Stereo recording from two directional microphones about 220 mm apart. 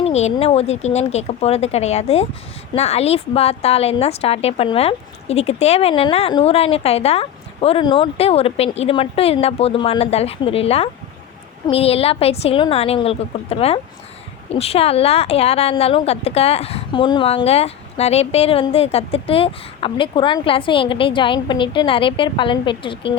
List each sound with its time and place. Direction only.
0.0 s a woman's voice: 30° left (ahead or behind)